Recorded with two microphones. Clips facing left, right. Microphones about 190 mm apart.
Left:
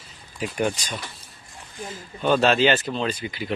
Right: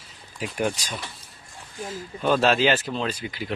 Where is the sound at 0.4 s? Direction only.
Centre (ahead or behind).